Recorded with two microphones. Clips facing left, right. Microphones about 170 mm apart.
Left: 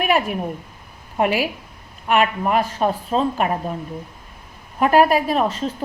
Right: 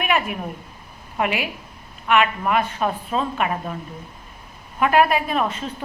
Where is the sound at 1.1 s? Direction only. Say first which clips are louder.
Left 4 dB; 40° left (ahead or behind).